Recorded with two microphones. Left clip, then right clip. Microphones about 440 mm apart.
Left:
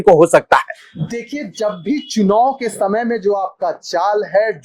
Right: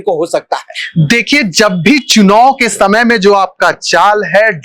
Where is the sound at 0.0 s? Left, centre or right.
Left.